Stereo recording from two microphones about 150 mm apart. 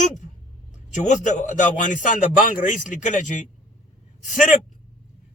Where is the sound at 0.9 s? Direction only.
55° left (ahead or behind).